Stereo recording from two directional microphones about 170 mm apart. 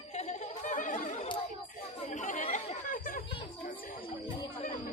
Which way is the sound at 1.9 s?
45° left (ahead or behind).